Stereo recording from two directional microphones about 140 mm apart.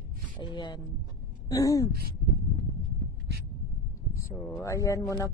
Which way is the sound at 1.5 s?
25° left (ahead or behind).